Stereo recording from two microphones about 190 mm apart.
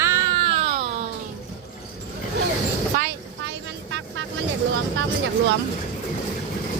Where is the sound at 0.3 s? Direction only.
30° right (ahead or behind).